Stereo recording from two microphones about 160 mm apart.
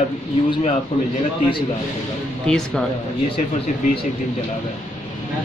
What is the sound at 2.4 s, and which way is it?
Speech, 5° left (ahead or behind).